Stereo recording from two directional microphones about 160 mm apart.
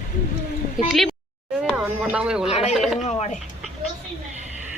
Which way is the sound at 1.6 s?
5° right (ahead or behind).